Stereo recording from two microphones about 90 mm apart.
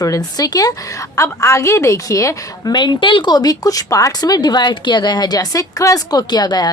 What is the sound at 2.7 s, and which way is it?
Speech, 55° left (ahead or behind).